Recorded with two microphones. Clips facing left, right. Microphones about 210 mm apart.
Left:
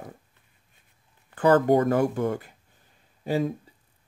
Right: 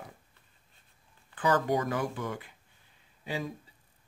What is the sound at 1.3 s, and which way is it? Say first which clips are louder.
A man's voice: left 9 dB; 50° left (ahead or behind).